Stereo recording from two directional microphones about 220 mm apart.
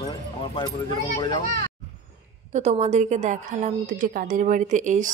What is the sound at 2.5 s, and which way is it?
A woman's voice, 30° right (ahead or behind).